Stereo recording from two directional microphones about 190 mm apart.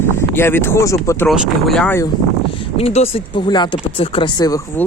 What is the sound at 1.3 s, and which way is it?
Speech, centre (ahead or behind).